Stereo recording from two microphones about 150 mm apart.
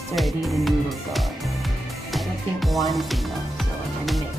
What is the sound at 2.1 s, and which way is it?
Speech, centre (ahead or behind).